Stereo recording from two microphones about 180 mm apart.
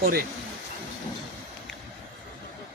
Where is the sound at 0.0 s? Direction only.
55° right (ahead or behind).